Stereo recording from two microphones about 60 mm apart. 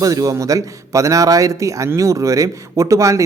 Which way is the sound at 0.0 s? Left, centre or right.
Right.